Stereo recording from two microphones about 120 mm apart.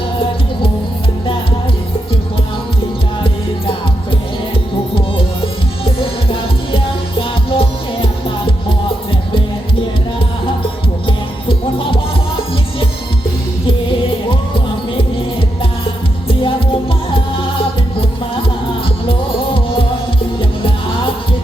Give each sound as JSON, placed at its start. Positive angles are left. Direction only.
{"t": 6.7, "sound": "music", "side_deg": 45}